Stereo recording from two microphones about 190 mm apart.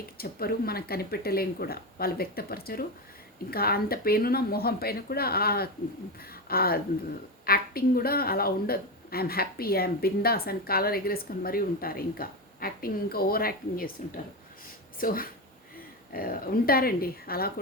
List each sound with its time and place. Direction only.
0.2 s a woman's voice: 50° left (ahead or behind)
14.9 s a woman's voice: 50° left (ahead or behind)